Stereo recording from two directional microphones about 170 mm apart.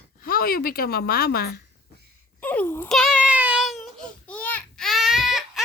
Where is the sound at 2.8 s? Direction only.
Centre (ahead or behind).